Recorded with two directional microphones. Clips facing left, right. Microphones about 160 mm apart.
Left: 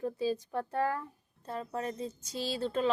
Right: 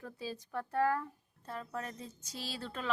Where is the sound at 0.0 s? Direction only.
25° left (ahead or behind).